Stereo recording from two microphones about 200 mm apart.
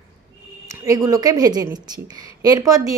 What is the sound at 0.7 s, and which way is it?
A woman's voice, 15° right (ahead or behind).